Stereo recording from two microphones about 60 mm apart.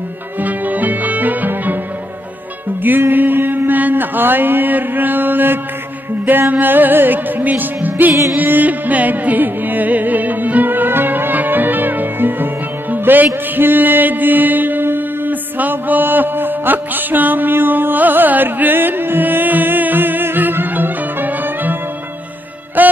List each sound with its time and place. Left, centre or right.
0.4 s music: right
2.8 s music: right
22.8 s music: right